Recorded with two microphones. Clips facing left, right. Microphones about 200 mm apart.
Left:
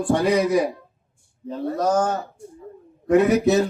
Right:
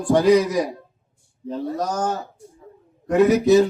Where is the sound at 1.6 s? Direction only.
60° left (ahead or behind).